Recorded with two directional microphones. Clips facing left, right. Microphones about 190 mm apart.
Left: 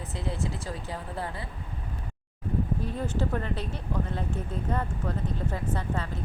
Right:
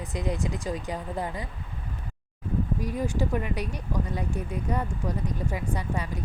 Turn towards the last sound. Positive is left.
turn(degrees=-15)  # may be behind; listen again after turning